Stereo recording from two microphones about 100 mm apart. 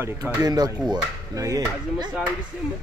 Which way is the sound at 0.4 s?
40° right (ahead or behind).